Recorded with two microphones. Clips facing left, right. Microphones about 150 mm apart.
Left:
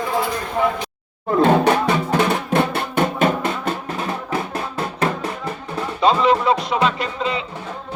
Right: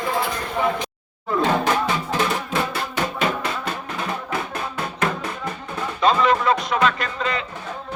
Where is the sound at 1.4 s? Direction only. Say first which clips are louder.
Left 5 dB; 55° left (ahead or behind).